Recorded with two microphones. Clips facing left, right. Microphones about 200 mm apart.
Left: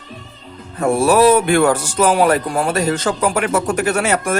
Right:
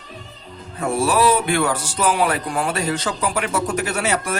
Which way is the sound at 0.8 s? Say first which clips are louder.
Left 6 dB; 45° left (ahead or behind).